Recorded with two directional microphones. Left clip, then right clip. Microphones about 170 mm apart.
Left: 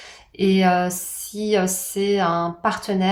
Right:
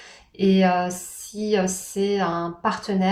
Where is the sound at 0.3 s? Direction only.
40° left (ahead or behind).